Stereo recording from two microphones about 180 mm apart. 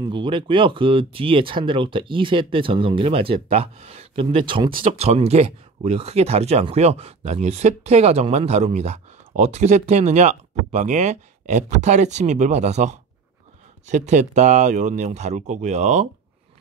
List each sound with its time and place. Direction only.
0.0 s speech: 25° right (ahead or behind)